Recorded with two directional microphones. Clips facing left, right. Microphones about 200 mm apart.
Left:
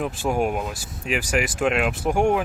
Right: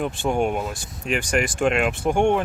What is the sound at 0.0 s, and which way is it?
Speech, 5° left (ahead or behind).